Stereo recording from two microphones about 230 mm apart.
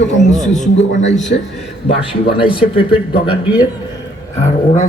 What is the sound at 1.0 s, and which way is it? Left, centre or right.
Speech, left.